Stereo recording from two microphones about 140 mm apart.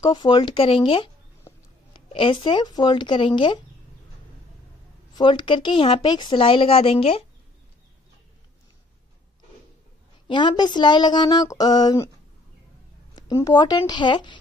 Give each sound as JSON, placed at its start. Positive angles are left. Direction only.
{"t": 0.0, "sound": "speech", "side_deg": 30}
{"t": 5.1, "sound": "speech", "side_deg": 35}
{"t": 10.2, "sound": "speech", "side_deg": 35}
{"t": 13.1, "sound": "speech", "side_deg": 30}